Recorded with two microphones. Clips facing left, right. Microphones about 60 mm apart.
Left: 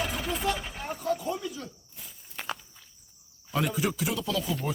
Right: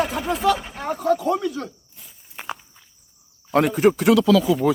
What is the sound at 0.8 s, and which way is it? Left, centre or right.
Speech, right.